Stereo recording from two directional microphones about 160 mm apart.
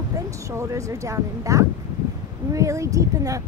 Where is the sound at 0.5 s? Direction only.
20° right (ahead or behind).